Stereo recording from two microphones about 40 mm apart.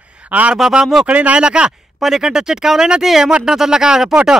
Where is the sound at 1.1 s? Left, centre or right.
Right.